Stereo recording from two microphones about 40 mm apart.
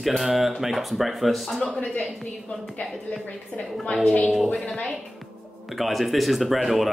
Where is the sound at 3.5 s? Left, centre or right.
Left.